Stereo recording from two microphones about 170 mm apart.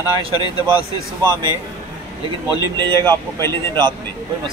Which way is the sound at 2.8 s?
25° right (ahead or behind).